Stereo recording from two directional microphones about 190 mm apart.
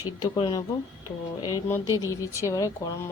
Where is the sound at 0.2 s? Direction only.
20° left (ahead or behind).